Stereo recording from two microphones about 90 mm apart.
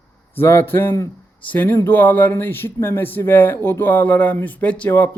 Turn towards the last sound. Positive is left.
turn(degrees=15)  # may be behind; listen again after turning